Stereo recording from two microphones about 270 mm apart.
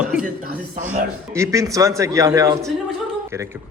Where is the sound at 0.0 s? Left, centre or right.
Centre.